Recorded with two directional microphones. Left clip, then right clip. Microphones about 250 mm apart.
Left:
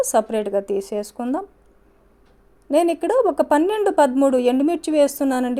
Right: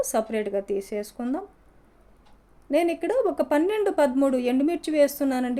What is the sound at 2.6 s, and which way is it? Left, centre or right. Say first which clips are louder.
A woman's voice: left 5 dB; left.